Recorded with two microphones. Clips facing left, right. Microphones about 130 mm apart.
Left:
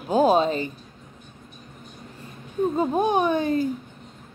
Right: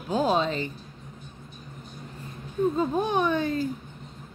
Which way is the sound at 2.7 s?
15° left (ahead or behind).